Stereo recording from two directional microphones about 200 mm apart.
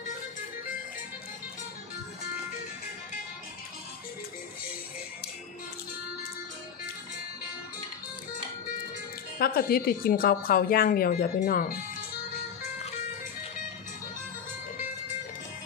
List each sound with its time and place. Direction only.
9.4 s a woman's voice: 50° left (ahead or behind)